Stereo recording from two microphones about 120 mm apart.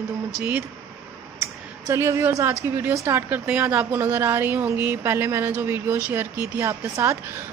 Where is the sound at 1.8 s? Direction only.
25° right (ahead or behind).